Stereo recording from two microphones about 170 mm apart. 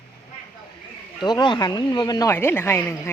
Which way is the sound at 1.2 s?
25° left (ahead or behind).